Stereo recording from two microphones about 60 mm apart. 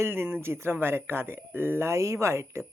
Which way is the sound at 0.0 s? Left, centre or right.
Right.